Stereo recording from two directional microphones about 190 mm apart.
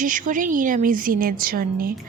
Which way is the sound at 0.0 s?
45° right (ahead or behind).